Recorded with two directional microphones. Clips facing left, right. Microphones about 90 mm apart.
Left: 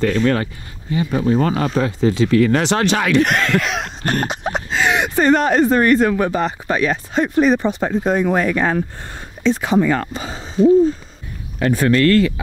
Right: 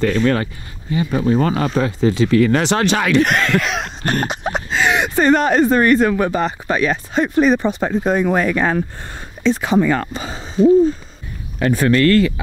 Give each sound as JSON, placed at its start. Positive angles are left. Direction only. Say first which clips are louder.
{"t": 0.0, "sound": "speech", "louder": "even", "side_deg": -15}